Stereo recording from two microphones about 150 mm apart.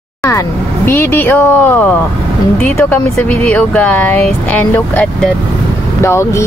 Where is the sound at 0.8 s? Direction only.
15° left (ahead or behind).